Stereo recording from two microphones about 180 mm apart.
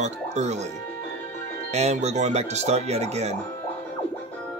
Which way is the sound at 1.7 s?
40° right (ahead or behind).